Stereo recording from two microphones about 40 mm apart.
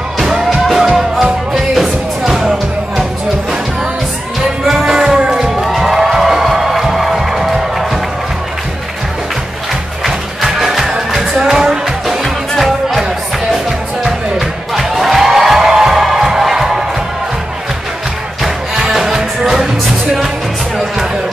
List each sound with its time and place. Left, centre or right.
0.2 s music: centre
4.6 s music: centre
5.6 s music: centre
10.0 s music: centre
14.7 s music: centre
18.8 s music: centre